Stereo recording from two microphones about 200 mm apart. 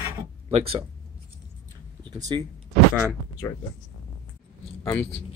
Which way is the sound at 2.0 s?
20° right (ahead or behind).